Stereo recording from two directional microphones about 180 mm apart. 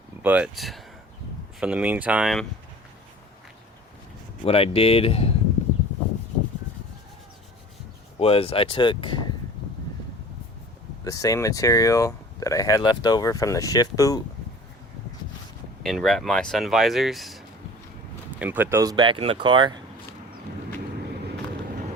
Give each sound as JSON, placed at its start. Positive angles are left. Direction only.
{"t": 0.2, "sound": "speech", "side_deg": -10}
{"t": 4.4, "sound": "speech", "side_deg": 30}
{"t": 8.2, "sound": "speech", "side_deg": 30}
{"t": 11.0, "sound": "speech", "side_deg": 20}
{"t": 15.8, "sound": "speech", "side_deg": 0}